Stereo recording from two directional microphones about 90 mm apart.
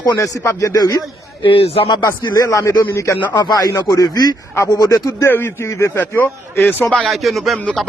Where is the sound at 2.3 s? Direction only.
40° left (ahead or behind).